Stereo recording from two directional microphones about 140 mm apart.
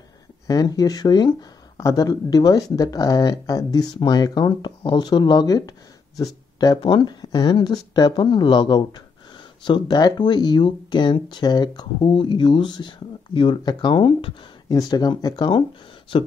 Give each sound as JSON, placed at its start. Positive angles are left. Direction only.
{"t": 0.5, "sound": "speech", "side_deg": 25}